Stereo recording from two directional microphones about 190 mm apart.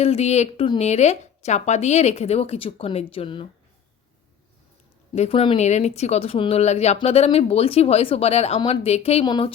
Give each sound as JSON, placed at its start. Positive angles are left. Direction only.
{"t": 0.0, "sound": "speech", "side_deg": 35}
{"t": 5.1, "sound": "speech", "side_deg": 35}